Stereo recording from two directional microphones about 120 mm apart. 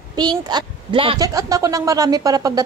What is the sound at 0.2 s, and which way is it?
Speech, 35° right (ahead or behind).